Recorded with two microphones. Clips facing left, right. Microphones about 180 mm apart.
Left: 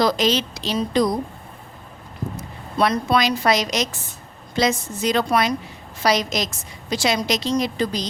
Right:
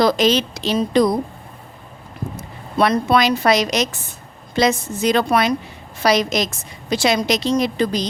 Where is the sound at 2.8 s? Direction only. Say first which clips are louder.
Right 3 dB; 60° right (ahead or behind).